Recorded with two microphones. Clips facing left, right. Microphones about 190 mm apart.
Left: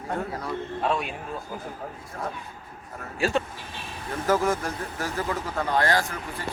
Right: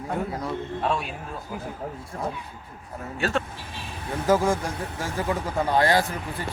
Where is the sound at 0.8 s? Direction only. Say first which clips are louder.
Left 1 dB; centre (ahead or behind).